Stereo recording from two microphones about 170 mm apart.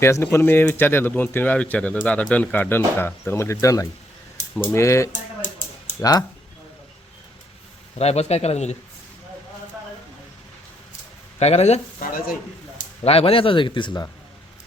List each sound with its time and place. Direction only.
0.0 s speech: 15° left (ahead or behind)
5.1 s a sound: 45° left (ahead or behind)
6.0 s speech: 20° left (ahead or behind)
7.9 s speech: 40° left (ahead or behind)
11.3 s speech: 40° left (ahead or behind)
12.1 s a sound: 50° left (ahead or behind)
13.1 s speech: 35° left (ahead or behind)